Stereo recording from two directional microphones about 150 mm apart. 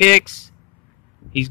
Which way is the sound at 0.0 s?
Centre (ahead or behind).